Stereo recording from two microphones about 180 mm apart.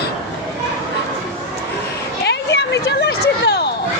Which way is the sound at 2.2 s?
70° left (ahead or behind).